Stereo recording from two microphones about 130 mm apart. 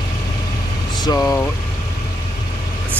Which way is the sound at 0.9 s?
30° left (ahead or behind).